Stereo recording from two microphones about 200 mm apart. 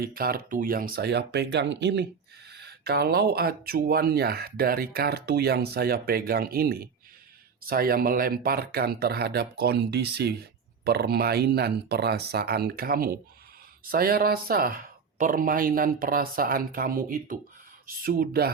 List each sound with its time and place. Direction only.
0.0 s speech: 50° right (ahead or behind)